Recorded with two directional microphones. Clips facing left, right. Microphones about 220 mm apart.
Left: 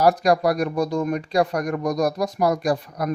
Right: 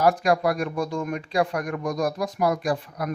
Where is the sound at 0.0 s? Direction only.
40° left (ahead or behind).